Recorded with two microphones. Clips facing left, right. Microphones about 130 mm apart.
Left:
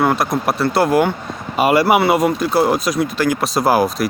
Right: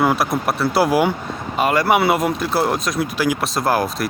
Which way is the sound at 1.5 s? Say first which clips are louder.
Left 3 dB; 10° left (ahead or behind).